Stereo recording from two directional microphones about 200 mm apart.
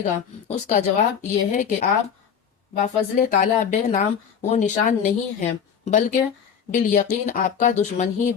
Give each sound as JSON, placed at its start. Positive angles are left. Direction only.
{"t": 0.0, "sound": "speech", "side_deg": 35}